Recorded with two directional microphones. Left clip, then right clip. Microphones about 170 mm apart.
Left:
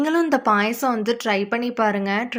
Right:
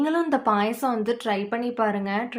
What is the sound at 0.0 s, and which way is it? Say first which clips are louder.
A woman's voice: left 3 dB; 20° left (ahead or behind).